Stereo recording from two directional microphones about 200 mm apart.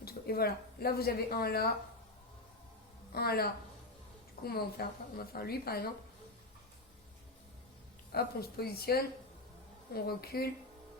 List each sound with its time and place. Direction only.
0.0 s a woman's voice: 50° left (ahead or behind)
3.2 s a woman's voice: 50° left (ahead or behind)
8.1 s a woman's voice: 50° left (ahead or behind)